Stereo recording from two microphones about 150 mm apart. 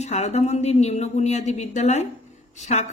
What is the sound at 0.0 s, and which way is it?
Speech, 50° left (ahead or behind).